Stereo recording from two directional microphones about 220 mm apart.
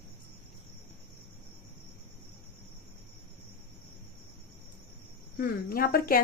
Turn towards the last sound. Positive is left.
turn(degrees=40)  # may be behind; listen again after turning